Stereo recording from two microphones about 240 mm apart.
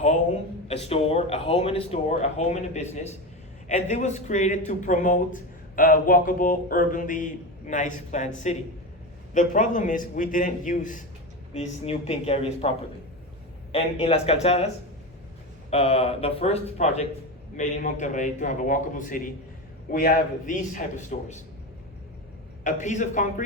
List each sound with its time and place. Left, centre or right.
0.7 s speech: left
13.7 s speech: left
15.7 s speech: left
22.6 s speech: left